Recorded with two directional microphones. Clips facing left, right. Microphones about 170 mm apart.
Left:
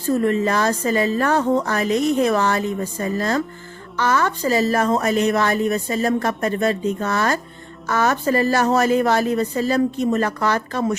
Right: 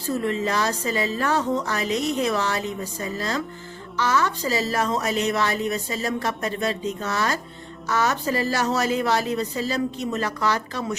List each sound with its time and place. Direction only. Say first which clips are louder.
0.2 s a woman's voice: left 5 dB; 50° left (ahead or behind)